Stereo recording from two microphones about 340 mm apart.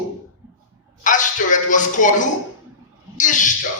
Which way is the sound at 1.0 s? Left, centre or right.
Left.